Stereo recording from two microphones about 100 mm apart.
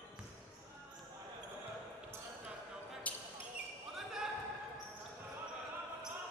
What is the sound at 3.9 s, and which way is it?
Basketball bounce, 5° right (ahead or behind).